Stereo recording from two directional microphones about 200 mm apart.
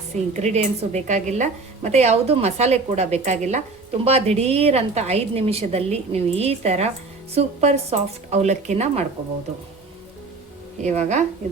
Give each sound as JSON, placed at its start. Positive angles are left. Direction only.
{"t": 0.3, "sound": "a woman's voice", "side_deg": -35}
{"t": 10.8, "sound": "a woman's voice", "side_deg": -35}